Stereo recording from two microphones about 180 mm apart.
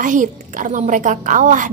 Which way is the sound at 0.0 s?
45° right (ahead or behind).